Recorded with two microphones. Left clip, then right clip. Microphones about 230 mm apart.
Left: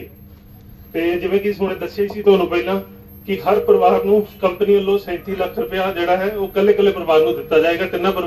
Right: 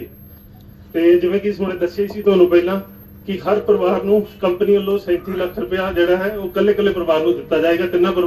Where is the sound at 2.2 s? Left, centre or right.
Left.